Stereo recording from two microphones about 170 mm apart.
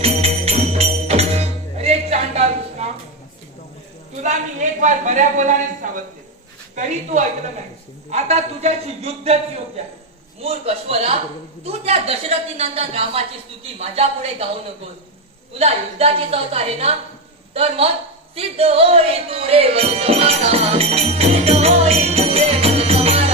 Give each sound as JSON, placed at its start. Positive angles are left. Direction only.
{"t": 0.0, "sound": "music", "side_deg": -35}
{"t": 4.2, "sound": "a man's voice", "side_deg": -45}
{"t": 8.1, "sound": "music", "side_deg": -40}
{"t": 17.5, "sound": "a man's voice", "side_deg": -35}
{"t": 18.3, "sound": "music", "side_deg": -35}